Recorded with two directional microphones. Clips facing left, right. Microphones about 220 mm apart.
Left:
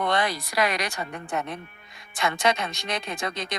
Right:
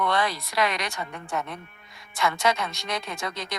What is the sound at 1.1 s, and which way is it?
A woman's voice, 15° left (ahead or behind).